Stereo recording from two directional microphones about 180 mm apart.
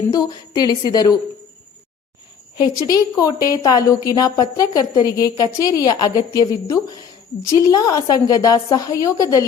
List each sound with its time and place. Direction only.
0.1 s a woman's voice: 20° left (ahead or behind)
2.6 s a woman's voice: 20° left (ahead or behind)